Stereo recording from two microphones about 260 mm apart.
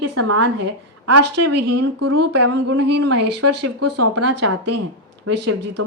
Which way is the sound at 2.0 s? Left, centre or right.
Right.